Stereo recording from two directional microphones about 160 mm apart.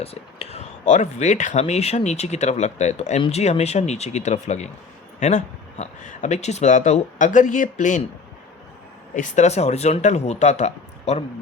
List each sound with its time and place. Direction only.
0.0 s speech: 40° left (ahead or behind)
9.1 s speech: 50° left (ahead or behind)